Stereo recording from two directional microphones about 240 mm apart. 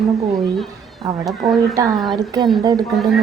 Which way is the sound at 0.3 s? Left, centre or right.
Centre.